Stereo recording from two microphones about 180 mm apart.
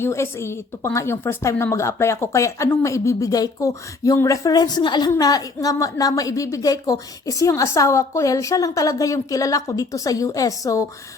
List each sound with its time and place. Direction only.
0.0 s a woman's voice: 15° left (ahead or behind)